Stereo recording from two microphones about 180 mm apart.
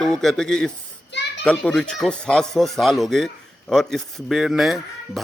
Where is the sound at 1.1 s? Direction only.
75° left (ahead or behind).